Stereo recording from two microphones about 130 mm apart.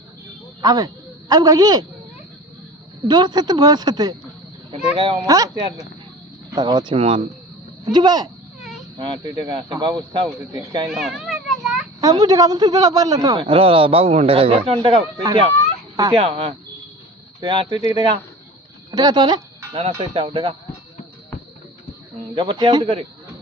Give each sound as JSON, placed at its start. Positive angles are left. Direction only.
{"t": 0.6, "sound": "speech", "side_deg": -30}
{"t": 3.1, "sound": "speech", "side_deg": -30}
{"t": 4.9, "sound": "speech", "side_deg": -45}
{"t": 5.2, "sound": "speech", "side_deg": -30}
{"t": 6.5, "sound": "speech", "side_deg": -35}
{"t": 6.9, "sound": "speech", "side_deg": -50}
{"t": 7.9, "sound": "speech", "side_deg": -30}
{"t": 10.8, "sound": "children playing", "side_deg": -5}
{"t": 11.9, "sound": "speech", "side_deg": -25}
{"t": 13.4, "sound": "speech", "side_deg": -45}
{"t": 15.2, "sound": "speech", "side_deg": -35}
{"t": 16.1, "sound": "speech", "side_deg": -45}
{"t": 22.4, "sound": "speech", "side_deg": -40}